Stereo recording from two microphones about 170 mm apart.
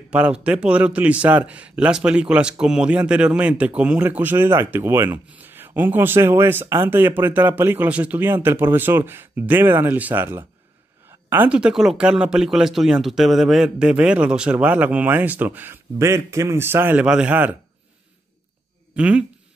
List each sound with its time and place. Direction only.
0.1 s a man's voice: 5° right (ahead or behind)
18.9 s a man's voice: 5° right (ahead or behind)